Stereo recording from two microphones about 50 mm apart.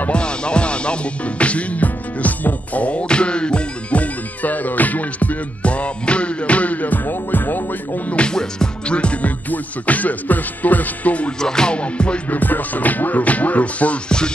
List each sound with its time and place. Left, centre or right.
0.1 s music: left
8.2 s music: centre
11.4 s music: centre
12.3 s music: left